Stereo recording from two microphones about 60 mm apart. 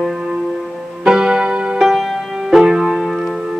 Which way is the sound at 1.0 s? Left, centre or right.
Centre.